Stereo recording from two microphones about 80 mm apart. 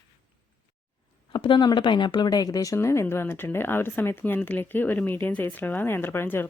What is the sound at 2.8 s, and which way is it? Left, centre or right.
Speech, left.